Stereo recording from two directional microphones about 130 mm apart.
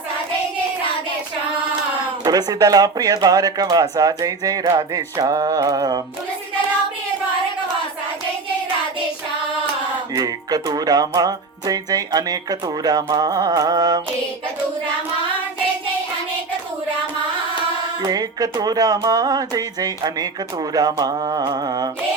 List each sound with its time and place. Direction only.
2.2 s music: 30° right (ahead or behind)
10.2 s music: 30° right (ahead or behind)
18.0 s music: 30° right (ahead or behind)
20.7 s mantra: 30° right (ahead or behind)